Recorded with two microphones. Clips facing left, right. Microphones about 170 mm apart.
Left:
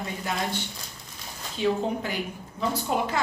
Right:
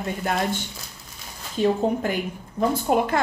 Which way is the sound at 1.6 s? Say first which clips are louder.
Right 4 dB; 50° right (ahead or behind).